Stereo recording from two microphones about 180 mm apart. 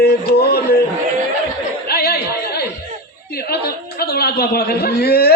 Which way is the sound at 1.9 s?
60° left (ahead or behind).